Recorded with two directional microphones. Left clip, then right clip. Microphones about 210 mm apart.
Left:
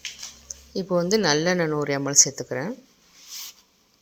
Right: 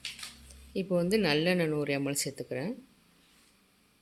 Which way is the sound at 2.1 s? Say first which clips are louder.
Left 15 dB; centre (ahead or behind).